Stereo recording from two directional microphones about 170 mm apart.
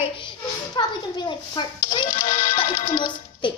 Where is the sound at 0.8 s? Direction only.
25° left (ahead or behind).